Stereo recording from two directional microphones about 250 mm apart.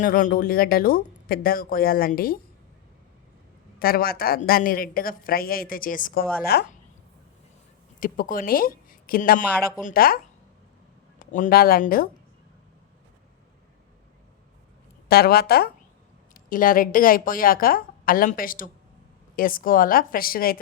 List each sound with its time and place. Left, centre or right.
0.0 s speech: left
3.8 s speech: left
7.9 s speech: left
11.3 s speech: left
15.1 s speech: left